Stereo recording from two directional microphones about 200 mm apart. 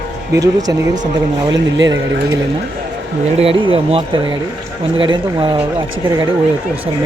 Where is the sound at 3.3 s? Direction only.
30° right (ahead or behind).